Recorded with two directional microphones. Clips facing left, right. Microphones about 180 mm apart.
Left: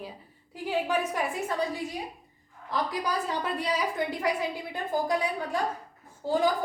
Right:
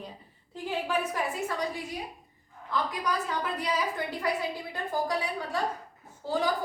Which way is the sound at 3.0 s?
30° left (ahead or behind).